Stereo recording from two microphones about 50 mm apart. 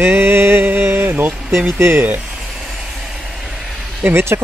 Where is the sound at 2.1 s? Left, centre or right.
Centre.